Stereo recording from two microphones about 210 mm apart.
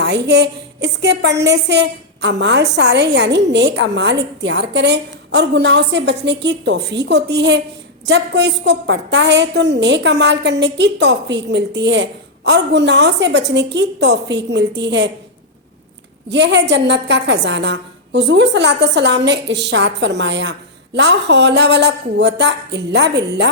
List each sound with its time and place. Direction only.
0.0 s a woman's voice: 55° right (ahead or behind)
16.3 s a woman's voice: 55° right (ahead or behind)